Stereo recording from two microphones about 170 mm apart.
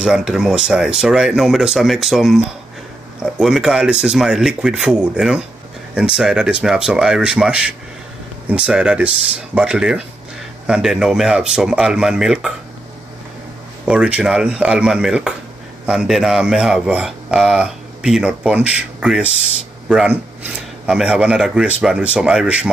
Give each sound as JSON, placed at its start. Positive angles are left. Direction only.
{"t": 0.0, "sound": "speech", "side_deg": 0}
{"t": 13.8, "sound": "speech", "side_deg": -5}